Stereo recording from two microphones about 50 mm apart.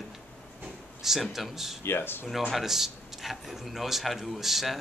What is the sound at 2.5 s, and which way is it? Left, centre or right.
A man's voice, centre.